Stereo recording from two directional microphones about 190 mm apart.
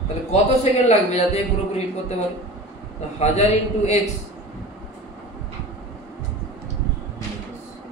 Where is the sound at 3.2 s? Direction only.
35° left (ahead or behind).